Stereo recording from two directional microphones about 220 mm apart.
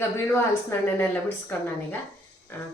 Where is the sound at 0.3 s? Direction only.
10° left (ahead or behind).